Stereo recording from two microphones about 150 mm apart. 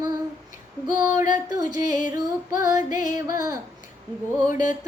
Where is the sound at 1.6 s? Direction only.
55° left (ahead or behind).